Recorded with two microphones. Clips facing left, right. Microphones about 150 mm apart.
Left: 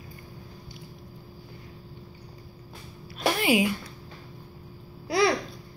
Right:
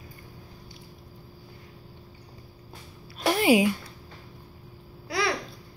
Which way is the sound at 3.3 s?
30° right (ahead or behind).